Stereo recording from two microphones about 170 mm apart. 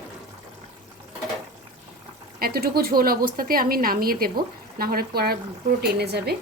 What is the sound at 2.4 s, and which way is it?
A woman's voice, 65° right (ahead or behind).